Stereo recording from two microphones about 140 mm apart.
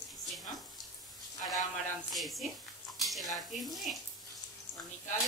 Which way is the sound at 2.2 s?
Centre (ahead or behind).